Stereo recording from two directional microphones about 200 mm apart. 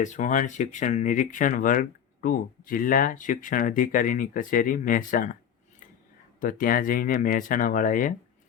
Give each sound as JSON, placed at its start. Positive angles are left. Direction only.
{"t": 0.0, "sound": "speech", "side_deg": 40}
{"t": 6.4, "sound": "speech", "side_deg": 45}